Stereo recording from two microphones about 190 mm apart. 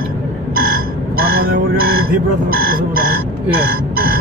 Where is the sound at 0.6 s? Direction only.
50° right (ahead or behind).